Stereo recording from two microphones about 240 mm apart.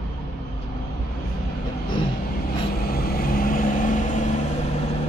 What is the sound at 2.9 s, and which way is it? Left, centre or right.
Vehicle, left.